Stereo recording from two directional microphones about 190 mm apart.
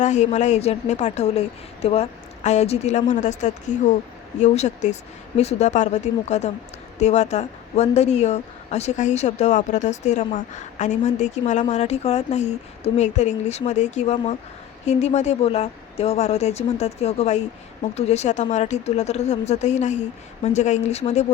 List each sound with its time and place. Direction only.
0.0 s a woman's voice: 40° left (ahead or behind)